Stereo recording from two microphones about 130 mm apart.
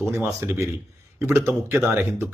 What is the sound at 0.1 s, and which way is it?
Speech, 20° right (ahead or behind).